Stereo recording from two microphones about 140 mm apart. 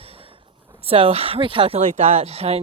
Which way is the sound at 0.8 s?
40° right (ahead or behind).